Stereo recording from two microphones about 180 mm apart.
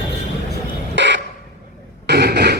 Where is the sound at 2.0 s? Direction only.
65° right (ahead or behind).